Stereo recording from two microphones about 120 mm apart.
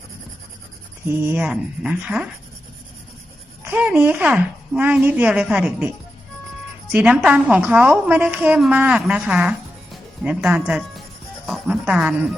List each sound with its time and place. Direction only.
1.0 s a woman's voice: 15° right (ahead or behind)
3.6 s a woman's voice: 15° right (ahead or behind)
6.9 s a woman's voice: 10° right (ahead or behind)
11.4 s music: centre (ahead or behind)
11.9 s a woman's voice: 10° right (ahead or behind)